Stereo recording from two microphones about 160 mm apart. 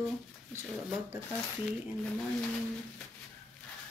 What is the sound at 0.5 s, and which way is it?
Speech, 15° right (ahead or behind).